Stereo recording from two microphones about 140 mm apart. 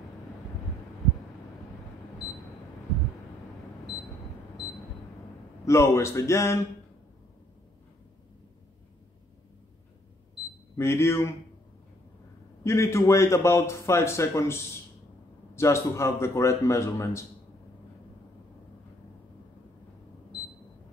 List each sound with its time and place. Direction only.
5.7 s a man's voice: 20° left (ahead or behind)
10.8 s a man's voice: 20° left (ahead or behind)
12.6 s a man's voice: 20° left (ahead or behind)